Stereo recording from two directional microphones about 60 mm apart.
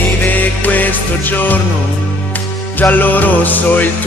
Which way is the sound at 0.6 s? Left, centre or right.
Left.